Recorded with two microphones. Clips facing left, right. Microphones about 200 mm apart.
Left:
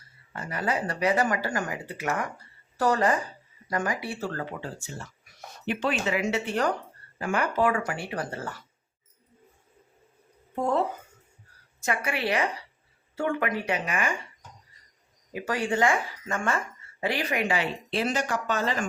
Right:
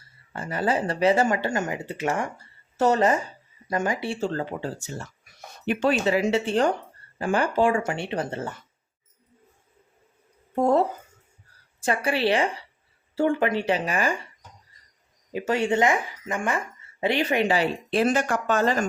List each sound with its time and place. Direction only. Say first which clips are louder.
0.3 s speech: right 4 dB; 30° right (ahead or behind)
5.6 s speech: right 5 dB; 40° right (ahead or behind); by 8.6 s 25° right (ahead or behind)
10.5 s speech: right 5 dB; 40° right (ahead or behind)
15.3 s speech: right 5 dB; 25° right (ahead or behind)
17.9 s speech: right 5 dB; 50° right (ahead or behind)